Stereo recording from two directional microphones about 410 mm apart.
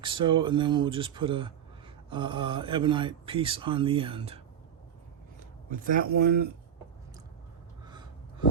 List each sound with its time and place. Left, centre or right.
0.0 s speech: centre
5.7 s speech: centre